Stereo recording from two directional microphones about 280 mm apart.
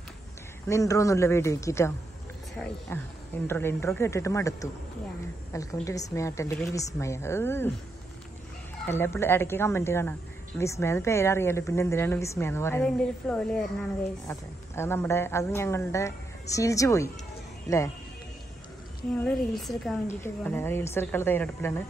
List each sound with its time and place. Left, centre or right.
0.7 s a woman's voice: centre
8.8 s a woman's voice: centre
19.1 s a woman's voice: centre